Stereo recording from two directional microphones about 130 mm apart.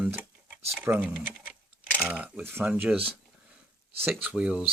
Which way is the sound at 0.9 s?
20° right (ahead or behind).